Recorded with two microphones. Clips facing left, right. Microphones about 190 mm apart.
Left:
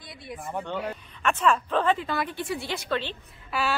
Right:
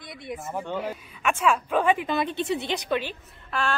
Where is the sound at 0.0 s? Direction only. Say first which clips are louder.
Right 4 dB; 20° right (ahead or behind).